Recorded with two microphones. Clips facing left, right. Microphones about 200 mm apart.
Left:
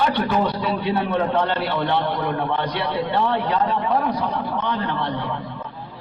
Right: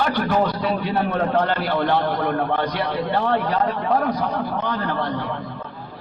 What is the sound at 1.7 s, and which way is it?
A man's voice, 50° right (ahead or behind).